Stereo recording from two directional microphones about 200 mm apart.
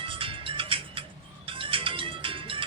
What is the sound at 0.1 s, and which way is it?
Music, 25° right (ahead or behind).